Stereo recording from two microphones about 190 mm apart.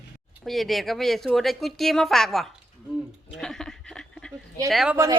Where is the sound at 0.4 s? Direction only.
Centre (ahead or behind).